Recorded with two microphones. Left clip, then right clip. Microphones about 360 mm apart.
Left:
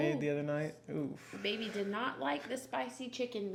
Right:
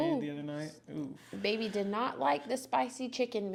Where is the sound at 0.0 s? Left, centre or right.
Centre.